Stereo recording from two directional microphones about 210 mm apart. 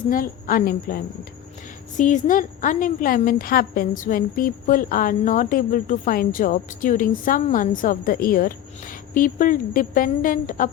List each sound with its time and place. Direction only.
0.1 s a woman's voice: 40° left (ahead or behind)